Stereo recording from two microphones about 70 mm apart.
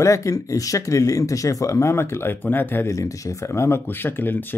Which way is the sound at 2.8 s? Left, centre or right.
Left.